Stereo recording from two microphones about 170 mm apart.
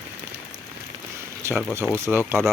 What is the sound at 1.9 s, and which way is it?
Speech, 15° right (ahead or behind).